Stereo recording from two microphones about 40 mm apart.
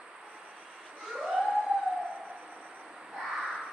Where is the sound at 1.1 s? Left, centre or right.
Right.